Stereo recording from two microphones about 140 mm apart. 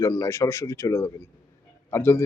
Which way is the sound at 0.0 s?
20° left (ahead or behind).